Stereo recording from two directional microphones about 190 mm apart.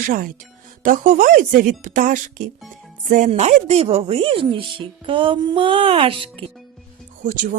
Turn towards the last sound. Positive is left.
turn(degrees=-45)  # may be behind; listen again after turning